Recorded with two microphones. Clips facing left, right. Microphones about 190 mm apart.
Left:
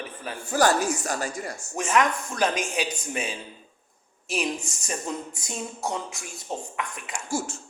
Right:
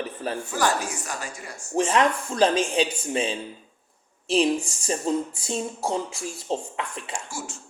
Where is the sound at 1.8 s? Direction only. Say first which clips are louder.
Right 3 dB; 30° right (ahead or behind).